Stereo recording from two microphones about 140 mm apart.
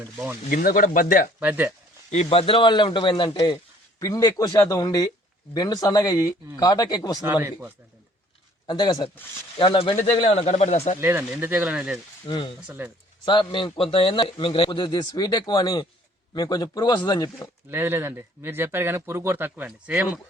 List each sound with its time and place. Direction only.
0.5 s speech: 85° left
1.4 s speech: 15° right (ahead or behind)
2.0 s speech: 50° left (ahead or behind); by 7.2 s 25° left (ahead or behind)
7.3 s speech: 15° right (ahead or behind)
8.6 s speech: 35° left (ahead or behind); by 10.9 s 55° left (ahead or behind)
11.0 s speech: 15° right (ahead or behind)
12.2 s speech: 35° left (ahead or behind)
12.5 s speech: 10° right (ahead or behind)
13.2 s speech: 35° left (ahead or behind)
17.7 s speech: 15° right (ahead or behind)